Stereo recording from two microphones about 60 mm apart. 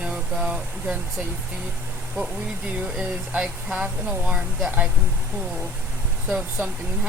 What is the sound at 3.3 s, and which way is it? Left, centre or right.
Speech, right.